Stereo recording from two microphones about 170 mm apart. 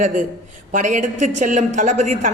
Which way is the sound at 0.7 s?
45° right (ahead or behind).